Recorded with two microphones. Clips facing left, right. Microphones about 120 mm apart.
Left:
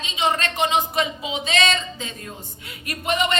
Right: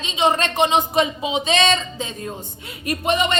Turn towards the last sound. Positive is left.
turn(degrees=-25)  # may be behind; listen again after turning